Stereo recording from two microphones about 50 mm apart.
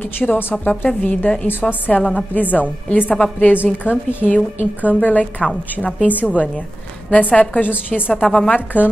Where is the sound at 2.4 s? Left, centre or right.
Left.